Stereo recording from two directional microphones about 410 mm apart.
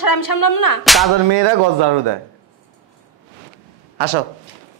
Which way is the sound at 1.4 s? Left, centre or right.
Right.